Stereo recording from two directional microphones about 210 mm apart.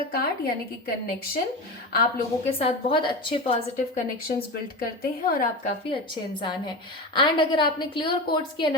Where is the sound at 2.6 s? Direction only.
25° left (ahead or behind).